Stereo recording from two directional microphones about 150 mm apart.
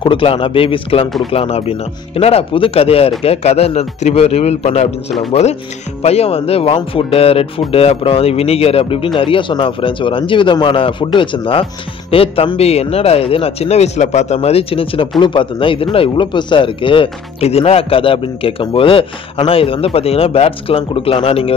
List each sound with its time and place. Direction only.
0.0 s a man's voice: 35° left (ahead or behind)